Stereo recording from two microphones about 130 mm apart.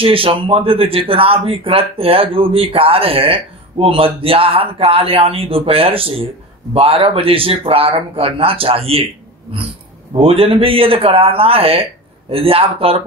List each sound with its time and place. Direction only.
0.0 s speech: 45° right (ahead or behind)
10.1 s speech: 45° right (ahead or behind)